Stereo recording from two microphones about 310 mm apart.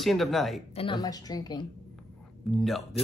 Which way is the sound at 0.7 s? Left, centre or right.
Centre.